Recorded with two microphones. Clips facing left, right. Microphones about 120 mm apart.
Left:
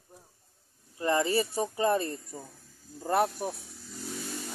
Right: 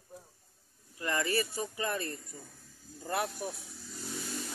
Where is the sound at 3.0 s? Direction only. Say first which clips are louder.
Left 8 dB; 45° left (ahead or behind).